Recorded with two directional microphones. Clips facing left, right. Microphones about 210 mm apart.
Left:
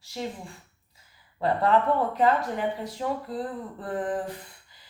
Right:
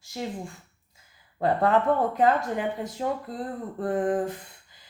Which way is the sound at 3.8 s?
50° right (ahead or behind).